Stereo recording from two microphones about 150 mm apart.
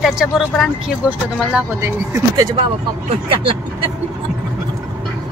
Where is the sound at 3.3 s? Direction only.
35° right (ahead or behind).